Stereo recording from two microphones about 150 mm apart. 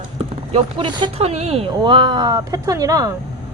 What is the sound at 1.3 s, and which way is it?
Speech, 45° right (ahead or behind).